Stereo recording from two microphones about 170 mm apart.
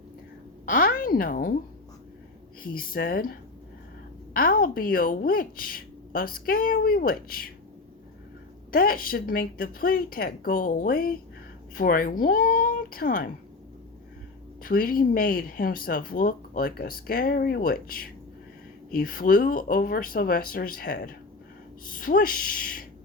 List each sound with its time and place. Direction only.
0.6 s a woman's voice: 55° left (ahead or behind)
2.6 s speech: 60° left (ahead or behind)
4.4 s speech: 55° left (ahead or behind)
8.7 s speech: 60° left (ahead or behind)
14.6 s speech: 55° left (ahead or behind)